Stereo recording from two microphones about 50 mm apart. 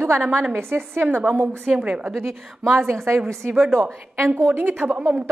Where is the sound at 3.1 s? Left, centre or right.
Right.